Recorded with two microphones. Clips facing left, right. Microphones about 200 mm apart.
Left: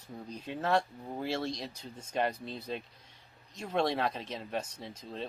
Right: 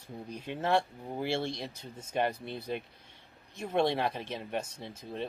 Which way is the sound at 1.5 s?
60° right (ahead or behind).